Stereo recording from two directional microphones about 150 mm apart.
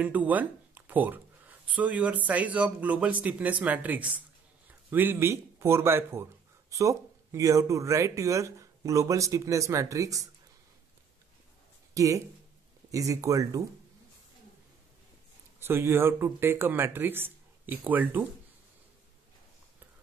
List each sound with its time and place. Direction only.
0.0 s speech: 10° right (ahead or behind)
11.9 s speech: 20° right (ahead or behind)
15.6 s speech: 15° right (ahead or behind)